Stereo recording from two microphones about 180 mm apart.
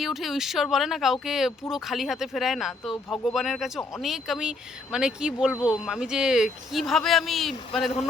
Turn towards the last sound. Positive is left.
turn(degrees=0)  # may be behind; listen again after turning